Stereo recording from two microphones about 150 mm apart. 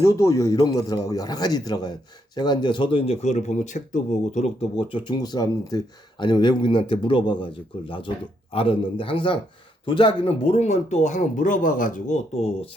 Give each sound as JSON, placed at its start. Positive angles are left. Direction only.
{"t": 0.0, "sound": "speech", "side_deg": 20}
{"t": 4.8, "sound": "speech", "side_deg": 35}